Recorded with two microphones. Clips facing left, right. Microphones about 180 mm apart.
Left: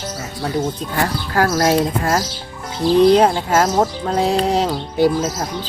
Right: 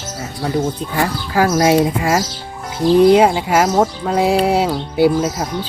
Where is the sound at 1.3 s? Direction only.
10° right (ahead or behind).